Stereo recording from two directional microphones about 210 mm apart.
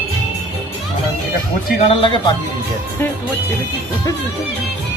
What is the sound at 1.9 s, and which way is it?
Speech, 25° left (ahead or behind).